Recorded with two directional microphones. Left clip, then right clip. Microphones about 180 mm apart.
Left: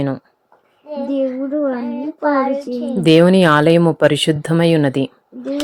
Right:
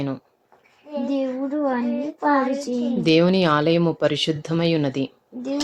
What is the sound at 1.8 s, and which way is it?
Speech, 40° left (ahead or behind).